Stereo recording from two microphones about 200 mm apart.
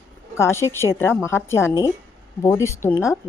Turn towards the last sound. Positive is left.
turn(degrees=15)  # may be behind; listen again after turning